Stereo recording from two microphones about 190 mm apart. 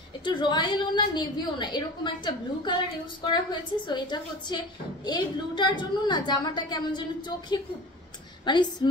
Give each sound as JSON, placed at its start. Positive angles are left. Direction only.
{"t": 0.2, "sound": "a woman's voice", "side_deg": 25}